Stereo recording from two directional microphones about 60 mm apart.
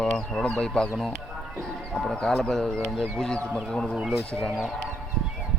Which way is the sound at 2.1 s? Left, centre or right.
Centre.